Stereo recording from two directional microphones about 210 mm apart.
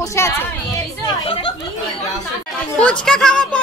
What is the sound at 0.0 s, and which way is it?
A woman's voice, 15° left (ahead or behind).